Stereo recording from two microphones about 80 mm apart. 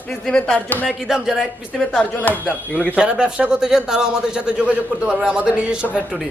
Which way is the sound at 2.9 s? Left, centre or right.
Centre.